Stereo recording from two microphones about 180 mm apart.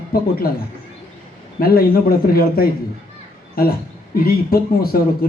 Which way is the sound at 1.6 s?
55° left (ahead or behind).